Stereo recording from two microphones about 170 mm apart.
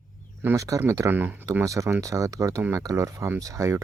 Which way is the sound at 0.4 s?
20° right (ahead or behind).